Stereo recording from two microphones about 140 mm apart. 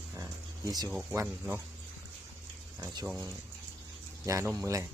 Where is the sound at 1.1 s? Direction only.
15° right (ahead or behind).